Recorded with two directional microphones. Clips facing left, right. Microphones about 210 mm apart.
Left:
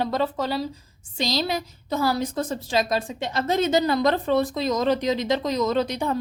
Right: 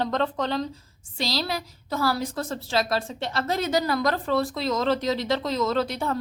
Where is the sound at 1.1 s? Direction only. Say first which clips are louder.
Left 3 dB; 20° left (ahead or behind).